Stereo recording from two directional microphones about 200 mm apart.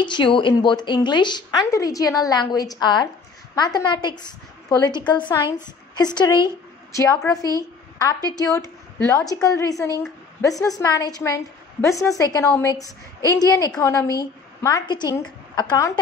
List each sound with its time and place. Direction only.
0.0 s a woman's voice: 25° left (ahead or behind)